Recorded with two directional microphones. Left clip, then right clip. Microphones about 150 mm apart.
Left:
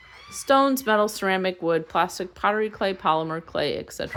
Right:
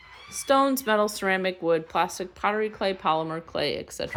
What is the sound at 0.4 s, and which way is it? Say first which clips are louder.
Speech: left 2 dB; 15° left (ahead or behind).